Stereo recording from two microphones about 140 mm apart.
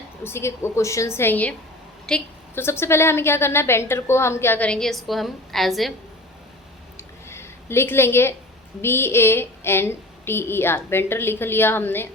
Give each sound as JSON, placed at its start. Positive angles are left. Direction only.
{"t": 0.3, "sound": "a woman's voice", "side_deg": 20}
{"t": 2.6, "sound": "a woman's voice", "side_deg": 15}
{"t": 6.9, "sound": "a sound", "side_deg": 20}
{"t": 8.8, "sound": "a woman's voice", "side_deg": 15}